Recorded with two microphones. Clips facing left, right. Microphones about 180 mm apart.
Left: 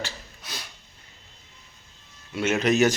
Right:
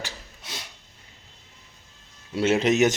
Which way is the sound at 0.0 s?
25° right (ahead or behind).